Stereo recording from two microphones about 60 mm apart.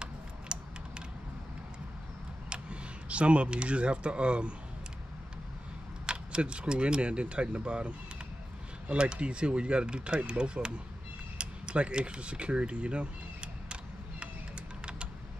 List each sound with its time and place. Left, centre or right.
0.0 s typing: centre
2.5 s speech: centre
6.0 s speech: centre